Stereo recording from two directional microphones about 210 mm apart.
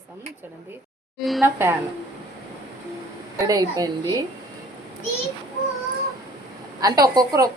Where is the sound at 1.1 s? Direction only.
Centre (ahead or behind).